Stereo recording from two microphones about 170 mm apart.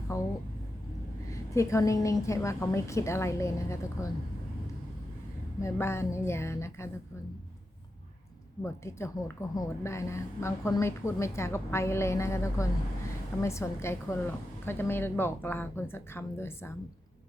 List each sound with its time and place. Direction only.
0.1 s speech: 20° left (ahead or behind)
1.3 s a woman's voice: 20° left (ahead or behind)
5.6 s a woman's voice: 15° left (ahead or behind)
8.6 s a woman's voice: 15° left (ahead or behind)